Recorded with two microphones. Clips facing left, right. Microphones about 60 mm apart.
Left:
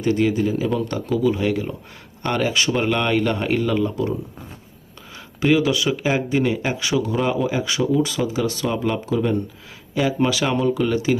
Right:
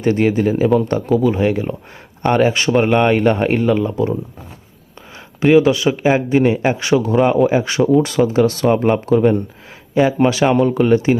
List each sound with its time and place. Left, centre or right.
0.0 s speech: right
6.7 s speech: right
9.9 s speech: right